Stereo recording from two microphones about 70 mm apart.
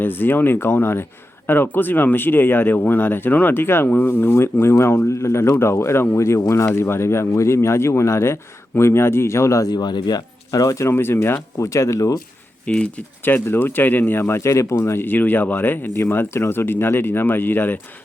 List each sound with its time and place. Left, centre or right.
0.0 s speech: left
9.6 s speech: left
11.6 s speech: left
12.6 s speech: centre
13.2 s speech: left